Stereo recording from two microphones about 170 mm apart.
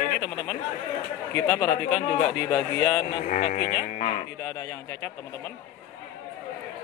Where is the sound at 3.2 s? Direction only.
50° left (ahead or behind).